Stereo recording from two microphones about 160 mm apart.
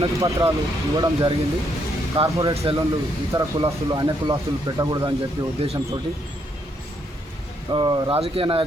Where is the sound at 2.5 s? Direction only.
40° right (ahead or behind).